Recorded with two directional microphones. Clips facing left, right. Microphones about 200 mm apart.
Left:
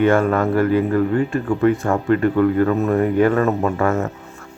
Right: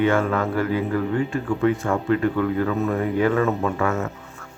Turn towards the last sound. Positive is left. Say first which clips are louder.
# left 4 dB
turn(degrees=40)  # may be behind; listen again after turning